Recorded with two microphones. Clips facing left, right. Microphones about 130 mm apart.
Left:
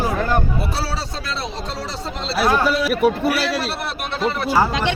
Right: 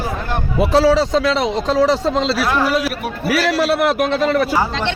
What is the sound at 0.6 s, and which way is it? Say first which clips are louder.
A man's voice: right 13 dB; 90° right.